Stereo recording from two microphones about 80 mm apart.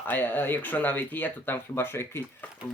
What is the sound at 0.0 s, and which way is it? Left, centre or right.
Speech, left.